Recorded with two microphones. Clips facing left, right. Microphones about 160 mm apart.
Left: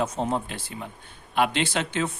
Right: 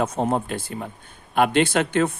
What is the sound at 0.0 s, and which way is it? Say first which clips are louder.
Speech: right 4 dB; 55° right (ahead or behind).